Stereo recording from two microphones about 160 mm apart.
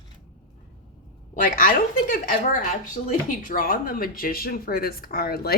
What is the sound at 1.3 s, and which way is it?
A woman's voice, 60° left (ahead or behind).